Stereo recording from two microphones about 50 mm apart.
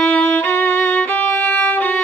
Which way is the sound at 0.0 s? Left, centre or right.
Left.